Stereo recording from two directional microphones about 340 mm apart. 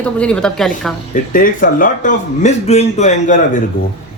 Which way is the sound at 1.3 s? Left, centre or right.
Left.